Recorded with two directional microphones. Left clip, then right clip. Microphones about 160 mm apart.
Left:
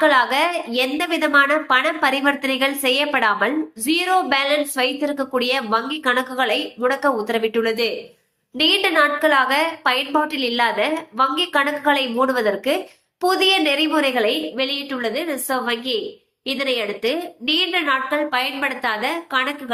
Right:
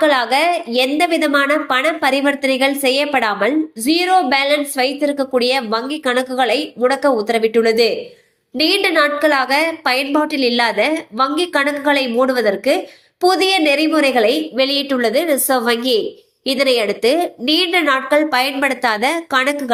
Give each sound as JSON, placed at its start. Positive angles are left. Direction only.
{"t": 0.0, "sound": "a woman's voice", "side_deg": -15}
{"t": 8.5, "sound": "a woman's voice", "side_deg": -15}
{"t": 14.2, "sound": "a woman's voice", "side_deg": -30}